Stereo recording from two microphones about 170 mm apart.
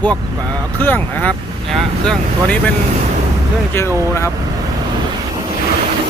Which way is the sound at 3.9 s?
15° right (ahead or behind).